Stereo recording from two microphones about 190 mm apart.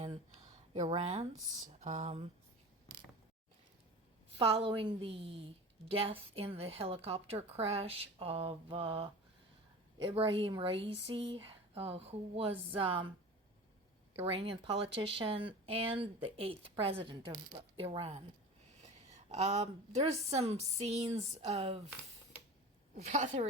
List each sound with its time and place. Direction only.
0.7 s a woman's voice: 35° right (ahead or behind)
4.4 s a woman's voice: 30° right (ahead or behind)
14.2 s speech: 30° right (ahead or behind)
19.3 s a woman's voice: 35° right (ahead or behind)
23.0 s a woman's voice: 35° right (ahead or behind)